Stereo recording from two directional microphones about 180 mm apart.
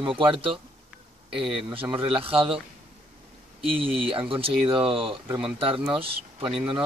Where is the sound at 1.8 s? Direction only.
10° right (ahead or behind).